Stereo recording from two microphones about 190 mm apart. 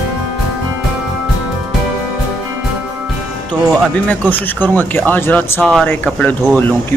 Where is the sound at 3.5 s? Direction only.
5° left (ahead or behind).